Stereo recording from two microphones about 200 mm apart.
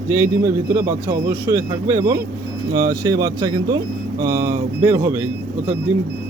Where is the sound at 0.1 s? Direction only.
15° right (ahead or behind).